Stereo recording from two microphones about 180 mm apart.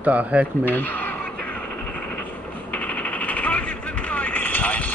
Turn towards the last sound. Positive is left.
turn(degrees=10)  # may be behind; listen again after turning